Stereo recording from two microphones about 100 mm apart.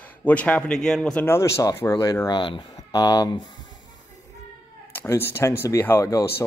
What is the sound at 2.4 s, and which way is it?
Speech, 50° left (ahead or behind).